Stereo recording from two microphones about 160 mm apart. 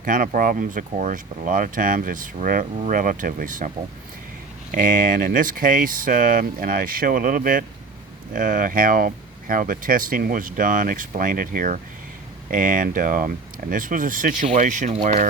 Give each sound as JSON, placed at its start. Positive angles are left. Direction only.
{"t": 0.0, "sound": "speech", "side_deg": -55}
{"t": 4.7, "sound": "speech", "side_deg": -55}